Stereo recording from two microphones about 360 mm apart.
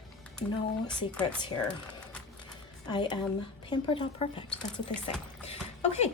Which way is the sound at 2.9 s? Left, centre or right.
Centre.